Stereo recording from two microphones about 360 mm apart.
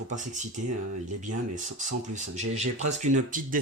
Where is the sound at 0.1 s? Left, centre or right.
Centre.